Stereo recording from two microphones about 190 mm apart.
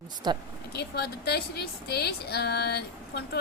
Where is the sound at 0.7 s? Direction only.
60° left (ahead or behind).